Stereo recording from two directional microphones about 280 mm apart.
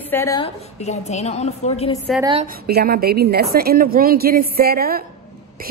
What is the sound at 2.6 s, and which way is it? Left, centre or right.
A woman's voice, right.